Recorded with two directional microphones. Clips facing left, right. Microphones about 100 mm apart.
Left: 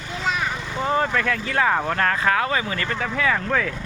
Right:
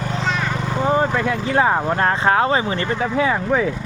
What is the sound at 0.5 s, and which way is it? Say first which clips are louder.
Vehicle: right 5 dB; 40° right (ahead or behind).